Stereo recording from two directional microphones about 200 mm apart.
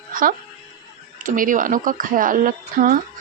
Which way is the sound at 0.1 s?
45° right (ahead or behind).